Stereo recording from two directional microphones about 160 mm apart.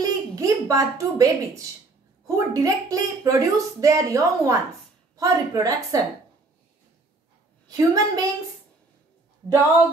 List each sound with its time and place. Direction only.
0.0 s a woman's voice: 20° right (ahead or behind)
7.6 s speech: 25° right (ahead or behind)